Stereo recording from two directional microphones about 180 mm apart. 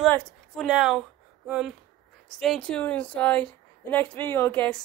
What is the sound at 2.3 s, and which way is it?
A woman's voice, centre (ahead or behind).